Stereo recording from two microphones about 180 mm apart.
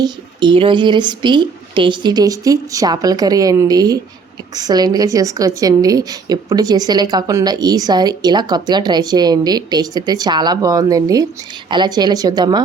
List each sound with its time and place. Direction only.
0.0 s a woman's voice: 25° right (ahead or behind)